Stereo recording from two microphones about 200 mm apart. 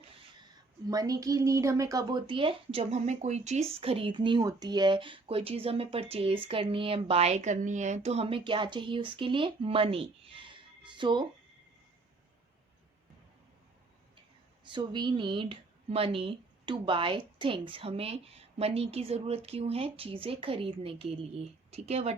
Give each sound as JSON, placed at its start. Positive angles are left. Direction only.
{"t": 0.9, "sound": "a woman's voice", "side_deg": -15}
{"t": 14.6, "sound": "a woman's voice", "side_deg": -25}